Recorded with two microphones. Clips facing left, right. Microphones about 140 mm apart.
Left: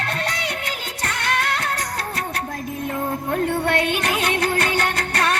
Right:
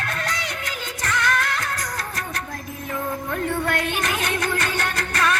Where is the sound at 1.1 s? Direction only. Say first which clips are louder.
Right 1 dB; 70° left (ahead or behind).